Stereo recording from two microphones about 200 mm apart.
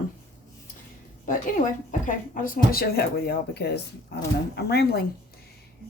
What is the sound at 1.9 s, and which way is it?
Speech, 40° left (ahead or behind).